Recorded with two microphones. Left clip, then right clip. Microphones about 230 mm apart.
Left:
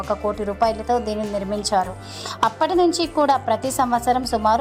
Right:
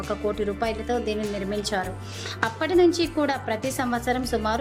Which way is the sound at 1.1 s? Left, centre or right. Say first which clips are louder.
Left 4 dB; centre.